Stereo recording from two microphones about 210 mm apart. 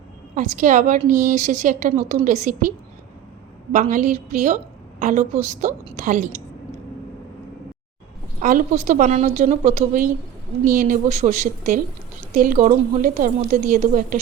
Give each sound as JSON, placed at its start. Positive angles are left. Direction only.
{"t": 0.3, "sound": "a woman's voice", "side_deg": -40}
{"t": 8.4, "sound": "a woman's voice", "side_deg": -40}